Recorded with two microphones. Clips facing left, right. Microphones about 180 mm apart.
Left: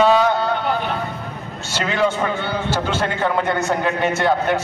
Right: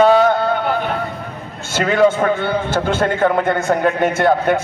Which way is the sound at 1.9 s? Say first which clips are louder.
Right 6 dB; 50° right (ahead or behind).